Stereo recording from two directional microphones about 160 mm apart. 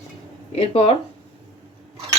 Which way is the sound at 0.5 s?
40° left (ahead or behind).